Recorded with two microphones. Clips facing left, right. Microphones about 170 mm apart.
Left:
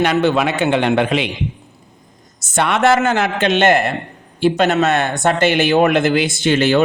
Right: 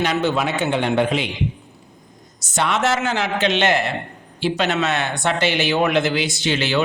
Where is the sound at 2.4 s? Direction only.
55° left (ahead or behind).